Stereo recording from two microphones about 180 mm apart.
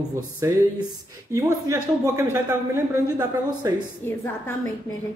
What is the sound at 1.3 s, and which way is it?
Speech, 15° right (ahead or behind).